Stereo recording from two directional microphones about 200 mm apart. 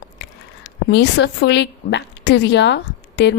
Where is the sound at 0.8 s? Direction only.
60° left (ahead or behind).